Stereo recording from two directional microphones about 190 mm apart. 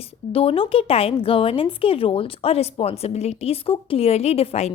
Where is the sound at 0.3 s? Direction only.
30° left (ahead or behind).